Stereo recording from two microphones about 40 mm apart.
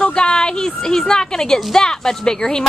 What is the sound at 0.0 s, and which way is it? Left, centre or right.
A woman's voice, left.